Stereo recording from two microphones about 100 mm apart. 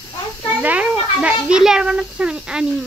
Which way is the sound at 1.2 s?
10° right (ahead or behind).